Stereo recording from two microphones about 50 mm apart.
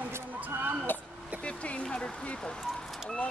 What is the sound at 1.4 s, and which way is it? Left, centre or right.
Speech, left.